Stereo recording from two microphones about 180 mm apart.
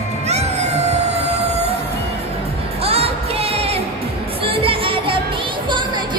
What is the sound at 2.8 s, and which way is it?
Music, 35° right (ahead or behind).